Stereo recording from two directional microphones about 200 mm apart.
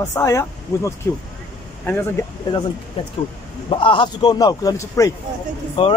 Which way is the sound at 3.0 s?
25° left (ahead or behind).